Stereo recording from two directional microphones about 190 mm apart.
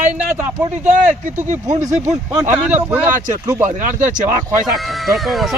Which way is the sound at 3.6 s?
40° right (ahead or behind).